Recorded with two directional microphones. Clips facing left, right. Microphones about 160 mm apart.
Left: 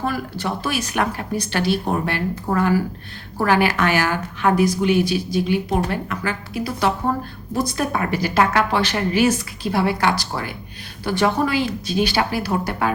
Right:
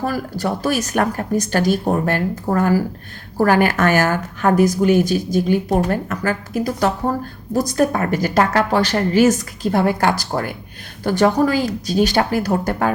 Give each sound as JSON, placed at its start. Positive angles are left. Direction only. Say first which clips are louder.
{"t": 0.0, "sound": "speech", "louder": "right 3 dB", "side_deg": -40}